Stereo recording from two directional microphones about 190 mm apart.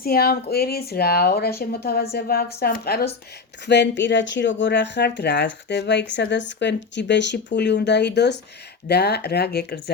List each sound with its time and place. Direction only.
0.0 s a woman's voice: 50° left (ahead or behind)
3.7 s speech: 70° left (ahead or behind)